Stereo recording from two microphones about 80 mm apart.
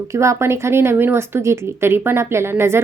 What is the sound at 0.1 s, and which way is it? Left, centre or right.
Speech, right.